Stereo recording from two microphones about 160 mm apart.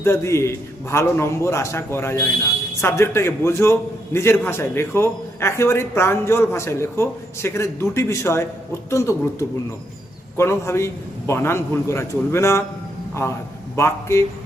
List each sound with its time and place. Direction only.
0.0 s a man's voice: 15° left (ahead or behind)